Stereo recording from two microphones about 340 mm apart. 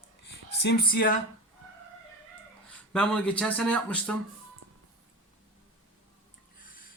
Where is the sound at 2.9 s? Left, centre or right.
Centre.